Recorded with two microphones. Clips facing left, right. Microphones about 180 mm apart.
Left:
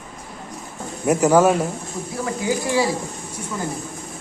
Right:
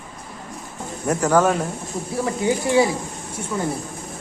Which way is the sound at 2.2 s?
25° right (ahead or behind).